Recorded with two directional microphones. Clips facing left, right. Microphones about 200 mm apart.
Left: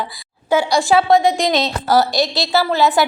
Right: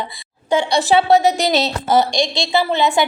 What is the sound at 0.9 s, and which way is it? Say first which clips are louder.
Speech: right 1 dB; 35° right (ahead or behind).